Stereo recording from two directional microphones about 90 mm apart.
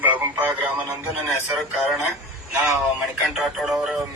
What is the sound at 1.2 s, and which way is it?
Synthetic singing, centre (ahead or behind).